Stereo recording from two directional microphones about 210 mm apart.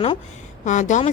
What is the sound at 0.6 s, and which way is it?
Speech, 35° left (ahead or behind).